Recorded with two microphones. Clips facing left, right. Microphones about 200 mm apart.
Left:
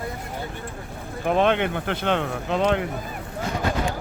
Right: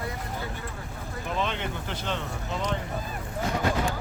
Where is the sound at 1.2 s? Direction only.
60° left (ahead or behind).